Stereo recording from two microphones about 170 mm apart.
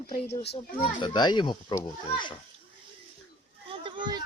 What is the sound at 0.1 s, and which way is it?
Speech, 75° left (ahead or behind).